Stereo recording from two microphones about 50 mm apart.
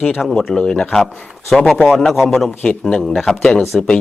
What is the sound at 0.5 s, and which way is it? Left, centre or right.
Speech, centre.